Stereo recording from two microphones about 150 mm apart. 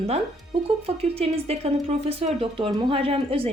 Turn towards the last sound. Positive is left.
turn(degrees=-40)  # may be behind; listen again after turning